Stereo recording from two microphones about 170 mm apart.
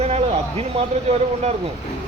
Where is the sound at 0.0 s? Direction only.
35° right (ahead or behind).